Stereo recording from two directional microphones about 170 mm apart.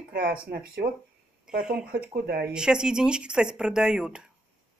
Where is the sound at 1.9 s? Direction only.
65° right (ahead or behind).